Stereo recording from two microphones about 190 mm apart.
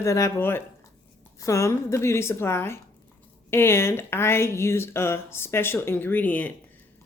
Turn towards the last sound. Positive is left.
turn(degrees=10)  # may be behind; listen again after turning